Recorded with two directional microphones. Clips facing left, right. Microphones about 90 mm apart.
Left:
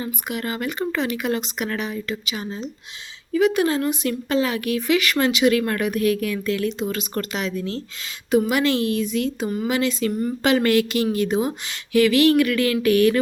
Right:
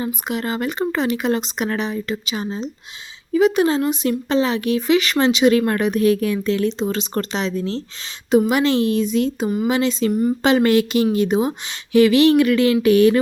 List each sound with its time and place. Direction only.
0.0 s speech: 25° right (ahead or behind)
10.1 s speech: 10° right (ahead or behind)
10.4 s speech: 25° right (ahead or behind)